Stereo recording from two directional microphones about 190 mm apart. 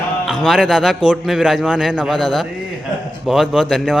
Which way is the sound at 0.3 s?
Centre (ahead or behind).